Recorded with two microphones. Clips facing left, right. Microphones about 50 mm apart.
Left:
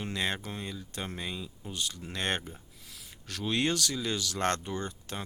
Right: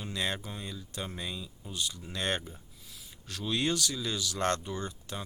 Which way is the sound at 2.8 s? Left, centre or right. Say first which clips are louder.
Left 1 dB; left.